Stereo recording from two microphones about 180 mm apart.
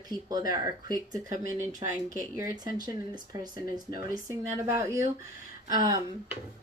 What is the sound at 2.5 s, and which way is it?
Speech, 20° right (ahead or behind).